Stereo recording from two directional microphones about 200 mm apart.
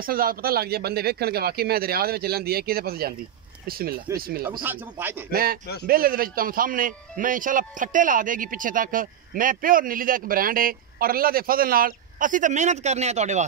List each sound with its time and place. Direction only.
0.0 s a man's voice: 45° right (ahead or behind)
4.5 s speech: 10° right (ahead or behind)
5.3 s a man's voice: 45° right (ahead or behind)